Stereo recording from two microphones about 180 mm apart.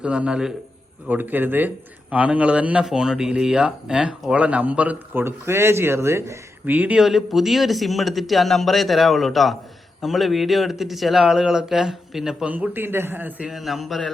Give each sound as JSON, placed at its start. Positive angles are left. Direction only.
{"t": 0.0, "sound": "a man's voice", "side_deg": -5}